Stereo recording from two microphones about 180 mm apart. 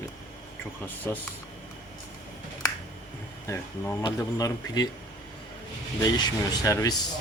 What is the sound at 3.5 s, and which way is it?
Speech, 10° left (ahead or behind).